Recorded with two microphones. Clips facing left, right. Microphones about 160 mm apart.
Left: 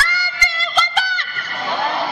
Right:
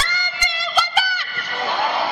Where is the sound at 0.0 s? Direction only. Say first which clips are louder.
Left 3 dB; 20° right (ahead or behind).